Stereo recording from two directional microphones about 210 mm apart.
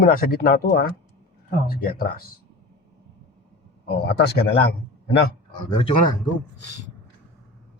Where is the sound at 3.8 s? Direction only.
50° left (ahead or behind).